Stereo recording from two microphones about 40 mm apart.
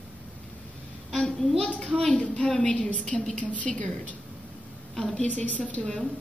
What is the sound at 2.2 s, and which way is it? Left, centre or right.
A woman's voice, left.